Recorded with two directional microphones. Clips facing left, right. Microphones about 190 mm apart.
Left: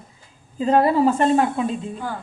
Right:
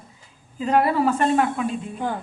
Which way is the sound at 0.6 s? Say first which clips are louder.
Left 3 dB; 30° left (ahead or behind).